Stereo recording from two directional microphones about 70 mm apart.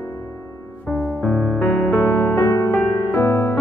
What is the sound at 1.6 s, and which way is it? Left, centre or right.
Music, left.